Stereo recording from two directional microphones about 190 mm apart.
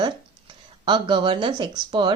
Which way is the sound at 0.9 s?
25° right (ahead or behind).